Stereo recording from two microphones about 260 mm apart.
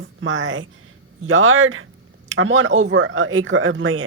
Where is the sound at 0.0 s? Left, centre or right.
Right.